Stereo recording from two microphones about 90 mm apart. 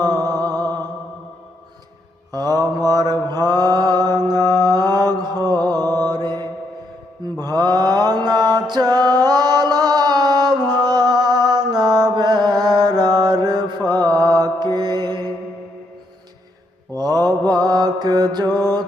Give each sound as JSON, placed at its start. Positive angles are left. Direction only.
{"t": 0.0, "sound": "music", "side_deg": -45}
{"t": 2.3, "sound": "mantra", "side_deg": -45}
{"t": 17.0, "sound": "mantra", "side_deg": -45}
{"t": 18.6, "sound": "music", "side_deg": -45}